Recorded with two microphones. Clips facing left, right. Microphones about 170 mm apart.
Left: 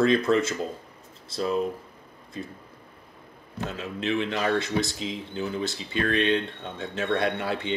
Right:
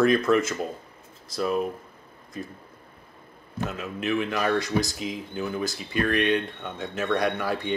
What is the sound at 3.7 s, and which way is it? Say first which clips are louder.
Speech: even; 30° left (ahead or behind).